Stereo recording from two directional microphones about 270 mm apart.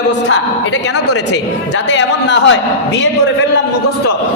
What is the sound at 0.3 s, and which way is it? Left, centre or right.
A woman's voice, left.